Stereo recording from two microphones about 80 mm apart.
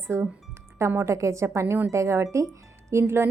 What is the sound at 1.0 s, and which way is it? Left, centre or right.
Speech, right.